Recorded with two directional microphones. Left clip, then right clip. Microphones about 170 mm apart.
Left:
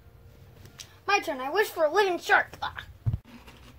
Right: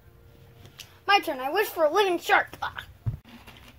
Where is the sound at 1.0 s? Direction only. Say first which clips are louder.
Right 4 dB; 35° right (ahead or behind).